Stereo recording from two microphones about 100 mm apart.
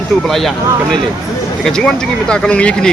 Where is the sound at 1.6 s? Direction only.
5° left (ahead or behind).